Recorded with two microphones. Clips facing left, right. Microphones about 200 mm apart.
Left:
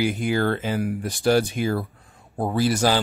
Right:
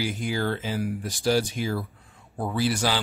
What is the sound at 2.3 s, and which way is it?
Speech, 40° left (ahead or behind).